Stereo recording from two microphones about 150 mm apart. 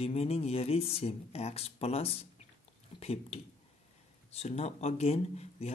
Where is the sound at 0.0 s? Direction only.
45° left (ahead or behind).